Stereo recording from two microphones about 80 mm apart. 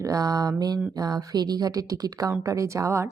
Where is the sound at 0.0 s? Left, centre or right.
Right.